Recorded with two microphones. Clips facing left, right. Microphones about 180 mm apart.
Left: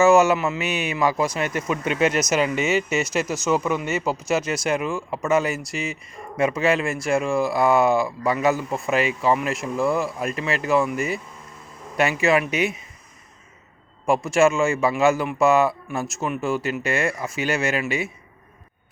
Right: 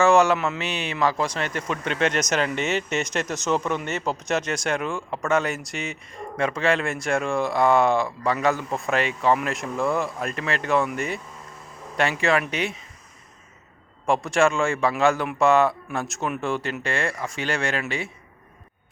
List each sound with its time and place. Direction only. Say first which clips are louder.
0.0 s speech: left 2 dB; 5° left (ahead or behind)
14.1 s speech: left 2 dB; 5° left (ahead or behind)